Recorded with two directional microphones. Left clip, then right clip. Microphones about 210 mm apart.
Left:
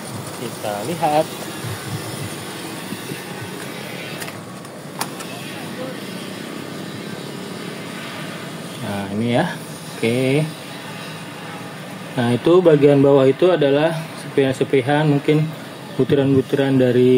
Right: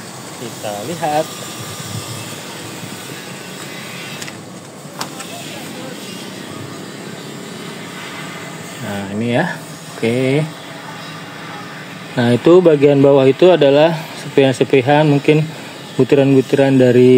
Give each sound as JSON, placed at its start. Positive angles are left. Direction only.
{"t": 1.0, "sound": "speech", "side_deg": 10}
{"t": 8.9, "sound": "speech", "side_deg": -10}
{"t": 12.2, "sound": "speech", "side_deg": -20}